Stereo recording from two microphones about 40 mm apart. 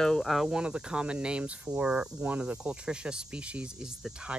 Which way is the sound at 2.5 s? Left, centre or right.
Right.